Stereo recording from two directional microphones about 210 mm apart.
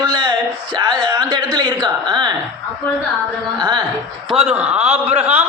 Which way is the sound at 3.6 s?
20° right (ahead or behind).